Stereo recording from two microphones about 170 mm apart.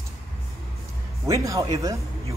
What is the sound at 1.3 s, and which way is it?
Speech, 20° right (ahead or behind).